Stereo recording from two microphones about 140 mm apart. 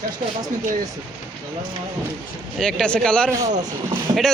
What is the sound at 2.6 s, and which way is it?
Speech, 5° left (ahead or behind).